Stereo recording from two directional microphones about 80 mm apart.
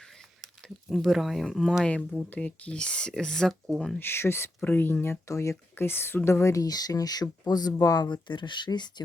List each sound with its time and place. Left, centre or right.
0.9 s speech: centre
2.1 s speech: centre
4.0 s speech: left